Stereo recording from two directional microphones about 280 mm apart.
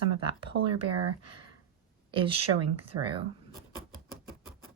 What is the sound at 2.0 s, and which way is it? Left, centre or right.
Speech, centre.